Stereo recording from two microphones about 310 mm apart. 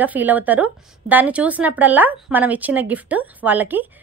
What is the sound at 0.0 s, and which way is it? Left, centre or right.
A woman's voice, centre.